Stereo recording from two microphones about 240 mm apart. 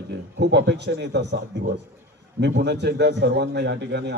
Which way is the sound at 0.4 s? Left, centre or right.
Right.